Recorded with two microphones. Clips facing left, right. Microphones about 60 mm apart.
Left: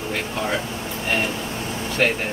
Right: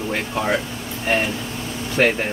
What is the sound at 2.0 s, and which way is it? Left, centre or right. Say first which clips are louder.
Speech: right 3 dB; centre.